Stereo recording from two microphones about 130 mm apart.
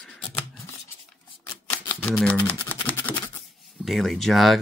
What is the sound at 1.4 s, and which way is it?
Typewriter, 15° left (ahead or behind).